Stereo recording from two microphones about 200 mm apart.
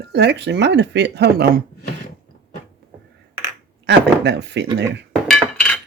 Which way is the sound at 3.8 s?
60° right (ahead or behind).